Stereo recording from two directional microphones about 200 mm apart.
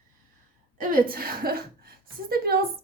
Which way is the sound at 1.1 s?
50° right (ahead or behind).